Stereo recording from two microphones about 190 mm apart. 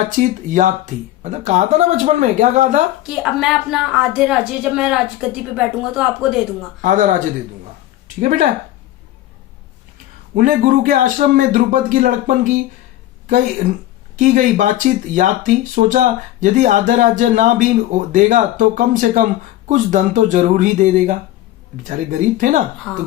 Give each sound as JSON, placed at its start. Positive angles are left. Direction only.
{"t": 0.2, "sound": "speech", "side_deg": -40}
{"t": 3.1, "sound": "a woman's voice", "side_deg": 0}
{"t": 6.8, "sound": "speech", "side_deg": -45}
{"t": 8.2, "sound": "speech", "side_deg": -45}
{"t": 10.3, "sound": "speech", "side_deg": -45}
{"t": 22.9, "sound": "speech", "side_deg": 10}